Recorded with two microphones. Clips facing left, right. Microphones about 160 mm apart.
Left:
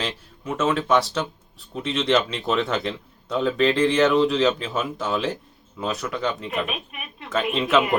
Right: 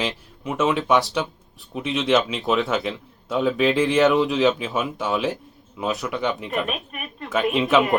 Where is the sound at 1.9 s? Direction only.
5° right (ahead or behind).